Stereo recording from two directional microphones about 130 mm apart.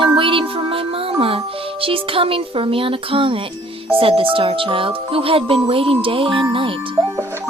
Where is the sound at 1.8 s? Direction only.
45° right (ahead or behind).